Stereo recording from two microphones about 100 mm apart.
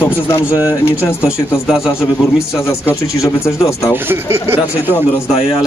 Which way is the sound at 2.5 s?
25° left (ahead or behind).